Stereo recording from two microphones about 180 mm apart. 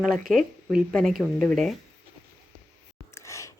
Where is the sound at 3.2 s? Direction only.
15° left (ahead or behind).